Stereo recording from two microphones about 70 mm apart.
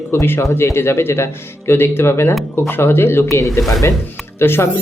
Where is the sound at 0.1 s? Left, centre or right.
Left.